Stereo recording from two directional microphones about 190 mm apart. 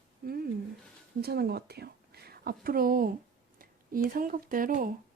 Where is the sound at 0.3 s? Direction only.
55° right (ahead or behind).